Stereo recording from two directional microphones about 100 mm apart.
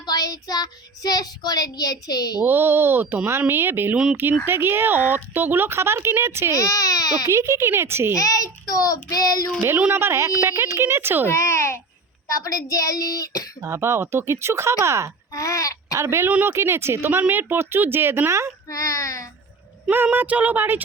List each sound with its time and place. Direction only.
0.0 s child singing: 40° left (ahead or behind)
2.4 s speech: 20° right (ahead or behind)
3.9 s speech: 10° right (ahead or behind)
4.4 s speech: 20° right (ahead or behind)
6.5 s a child's voice: 35° left (ahead or behind)
7.3 s speech: 30° right (ahead or behind)
8.1 s a child's voice: 35° left (ahead or behind)
9.6 s speech: 25° right (ahead or behind)
11.3 s a child's voice: 30° left (ahead or behind)
13.6 s speech: 25° right (ahead or behind)
15.3 s speech: 35° left (ahead or behind)
16.0 s speech: 25° right (ahead or behind)
18.7 s a child's voice: 35° left (ahead or behind)
19.9 s speech: 20° right (ahead or behind)